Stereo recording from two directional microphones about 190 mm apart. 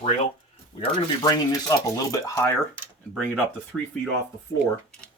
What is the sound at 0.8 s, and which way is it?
Speech, 20° left (ahead or behind).